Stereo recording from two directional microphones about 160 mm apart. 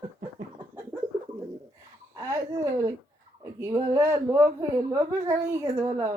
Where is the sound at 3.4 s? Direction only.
20° right (ahead or behind).